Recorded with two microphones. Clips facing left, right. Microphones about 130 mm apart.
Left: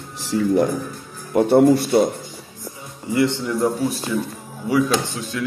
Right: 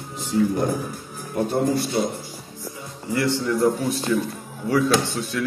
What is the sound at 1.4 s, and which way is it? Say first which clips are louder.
Speech: left 8 dB; 65° left (ahead or behind).